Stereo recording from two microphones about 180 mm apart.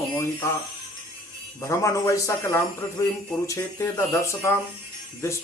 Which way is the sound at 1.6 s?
15° left (ahead or behind).